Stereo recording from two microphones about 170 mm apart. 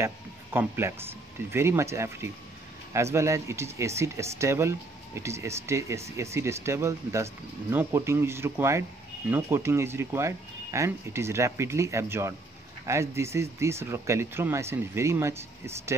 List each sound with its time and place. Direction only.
0.0 s speech: 15° right (ahead or behind)